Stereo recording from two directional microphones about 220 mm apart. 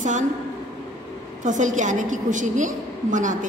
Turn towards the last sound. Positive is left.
turn(degrees=-35)  # may be behind; listen again after turning